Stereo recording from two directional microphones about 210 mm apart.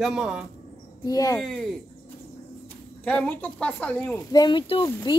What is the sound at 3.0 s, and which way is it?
A woman's voice, 5° left (ahead or behind).